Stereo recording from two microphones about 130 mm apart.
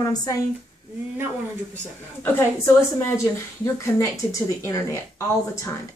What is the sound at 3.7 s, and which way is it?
Speech, 25° left (ahead or behind).